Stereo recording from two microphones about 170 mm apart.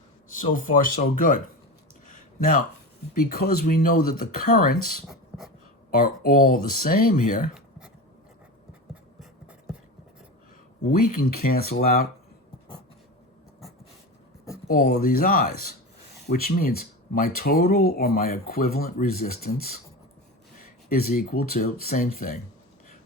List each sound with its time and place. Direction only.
0.3 s speech: 50° left (ahead or behind)
2.0 s a sound: 50° left (ahead or behind)
3.2 s speech: 60° left (ahead or behind)
10.8 s speech: 60° left (ahead or behind)
14.7 s speech: 45° left (ahead or behind)
15.1 s speech: 55° left (ahead or behind)
20.9 s speech: 60° left (ahead or behind)